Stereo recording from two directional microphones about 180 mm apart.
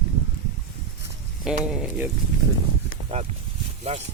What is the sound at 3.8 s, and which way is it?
Speech, 35° right (ahead or behind).